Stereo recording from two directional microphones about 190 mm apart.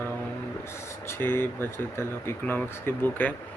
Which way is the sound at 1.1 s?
10° left (ahead or behind).